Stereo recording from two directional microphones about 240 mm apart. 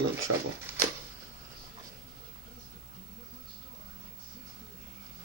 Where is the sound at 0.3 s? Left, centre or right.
Right.